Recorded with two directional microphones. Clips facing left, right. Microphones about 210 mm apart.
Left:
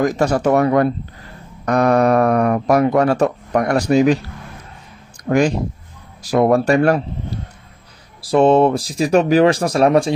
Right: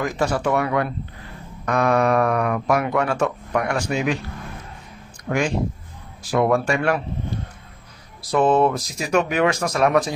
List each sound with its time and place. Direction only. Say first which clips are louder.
0.0 s speech: left 6 dB; 40° left (ahead or behind)
5.3 s speech: left 6 dB; 40° left (ahead or behind)
8.2 s speech: left 5 dB; 30° left (ahead or behind)